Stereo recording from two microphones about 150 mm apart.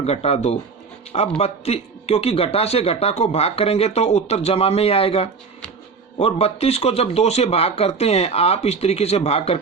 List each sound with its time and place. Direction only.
0.0 s speech: 45° left (ahead or behind)